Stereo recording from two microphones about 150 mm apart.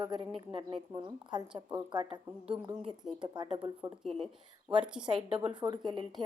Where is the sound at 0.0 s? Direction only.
35° right (ahead or behind).